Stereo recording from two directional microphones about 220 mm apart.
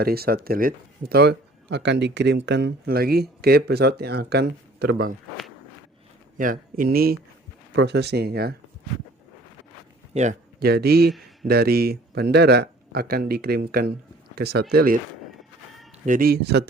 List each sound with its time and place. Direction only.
0.0 s speech: 45° right (ahead or behind)
6.3 s speech: 40° right (ahead or behind)
10.2 s speech: 40° right (ahead or behind)
16.0 s speech: 40° right (ahead or behind)